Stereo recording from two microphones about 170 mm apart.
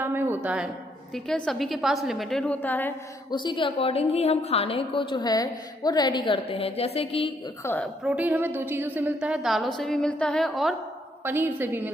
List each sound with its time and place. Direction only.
0.0 s a woman's voice: 10° right (ahead or behind); by 2.9 s 10° left (ahead or behind)
3.2 s a woman's voice: 25° left (ahead or behind)
7.6 s a woman's voice: 15° left (ahead or behind)
8.0 s a woman's voice: 10° right (ahead or behind)
11.2 s a woman's voice: 10° right (ahead or behind)